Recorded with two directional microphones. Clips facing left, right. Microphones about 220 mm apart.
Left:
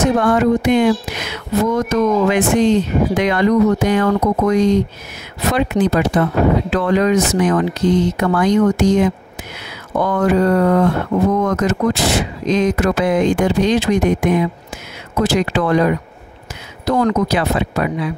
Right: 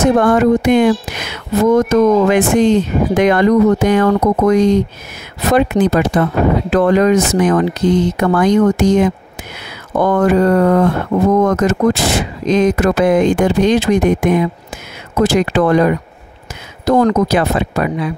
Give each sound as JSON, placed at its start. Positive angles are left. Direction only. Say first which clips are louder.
{"t": 0.0, "sound": "speech", "louder": "right 3 dB", "side_deg": -50}